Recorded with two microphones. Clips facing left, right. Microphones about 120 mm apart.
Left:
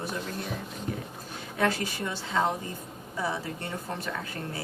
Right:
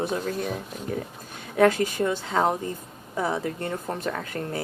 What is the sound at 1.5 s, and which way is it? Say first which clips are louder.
A woman's voice: right 8 dB; 45° right (ahead or behind).